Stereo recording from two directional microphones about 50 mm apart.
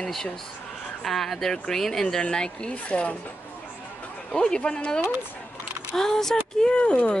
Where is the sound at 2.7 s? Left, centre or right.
Left.